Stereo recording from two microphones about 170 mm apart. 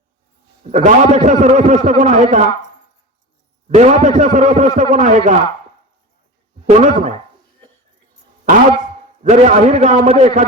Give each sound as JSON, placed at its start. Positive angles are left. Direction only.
{"t": 0.6, "sound": "a man's voice", "side_deg": -45}
{"t": 3.8, "sound": "a man's voice", "side_deg": -45}
{"t": 6.7, "sound": "a man's voice", "side_deg": -50}
{"t": 9.2, "sound": "a man's voice", "side_deg": -45}